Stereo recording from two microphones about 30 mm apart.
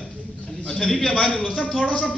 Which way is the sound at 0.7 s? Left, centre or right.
Centre.